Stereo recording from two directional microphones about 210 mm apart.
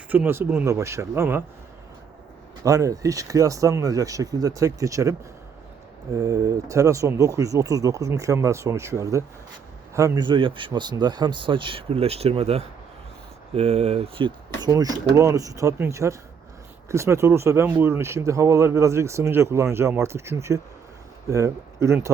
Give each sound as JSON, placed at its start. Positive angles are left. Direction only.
{"t": 0.1, "sound": "speech", "side_deg": -10}
{"t": 2.6, "sound": "speech", "side_deg": -15}
{"t": 6.1, "sound": "speech", "side_deg": -15}